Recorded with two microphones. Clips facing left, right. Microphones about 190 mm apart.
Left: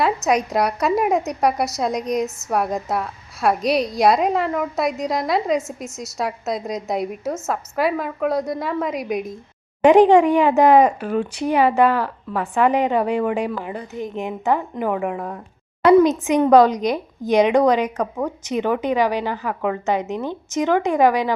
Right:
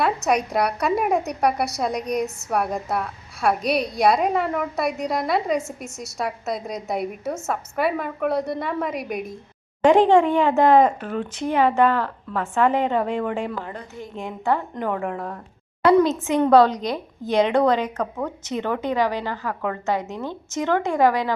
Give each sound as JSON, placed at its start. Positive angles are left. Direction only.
{"t": 0.3, "sound": "a woman's voice", "side_deg": 0}
{"t": 9.8, "sound": "speech", "side_deg": 15}